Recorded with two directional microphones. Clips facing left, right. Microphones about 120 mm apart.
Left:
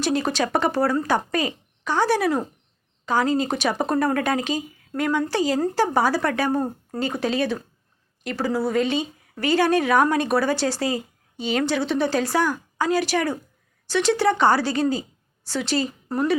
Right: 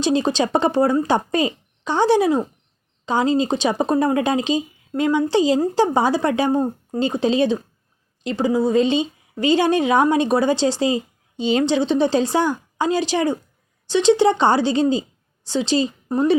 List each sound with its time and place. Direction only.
0.0 s a woman's voice: 20° right (ahead or behind)